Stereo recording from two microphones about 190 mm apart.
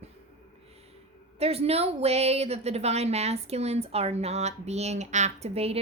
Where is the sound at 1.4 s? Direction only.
30° right (ahead or behind).